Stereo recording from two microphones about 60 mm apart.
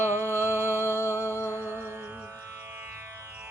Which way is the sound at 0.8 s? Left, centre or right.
Left.